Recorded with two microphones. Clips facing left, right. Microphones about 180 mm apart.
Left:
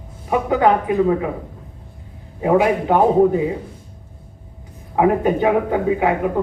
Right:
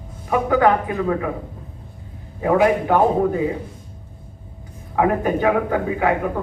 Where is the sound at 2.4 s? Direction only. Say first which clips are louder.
Left 1 dB; 20° left (ahead or behind).